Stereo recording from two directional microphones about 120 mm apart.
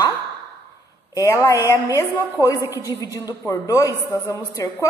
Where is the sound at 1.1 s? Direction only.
30° left (ahead or behind).